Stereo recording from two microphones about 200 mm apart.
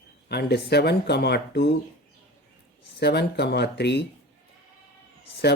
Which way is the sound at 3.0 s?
55° left (ahead or behind).